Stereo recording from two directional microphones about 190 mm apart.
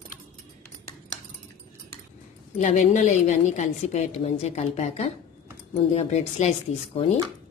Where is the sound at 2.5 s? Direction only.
40° left (ahead or behind).